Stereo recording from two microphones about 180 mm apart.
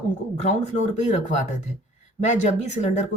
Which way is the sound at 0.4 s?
40° left (ahead or behind).